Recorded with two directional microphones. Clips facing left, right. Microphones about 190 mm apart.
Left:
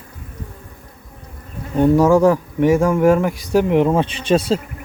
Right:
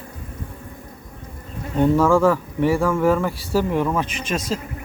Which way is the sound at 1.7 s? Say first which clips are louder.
Left 4 dB; 15° left (ahead or behind).